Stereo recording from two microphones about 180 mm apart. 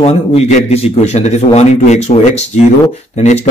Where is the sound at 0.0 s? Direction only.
35° left (ahead or behind).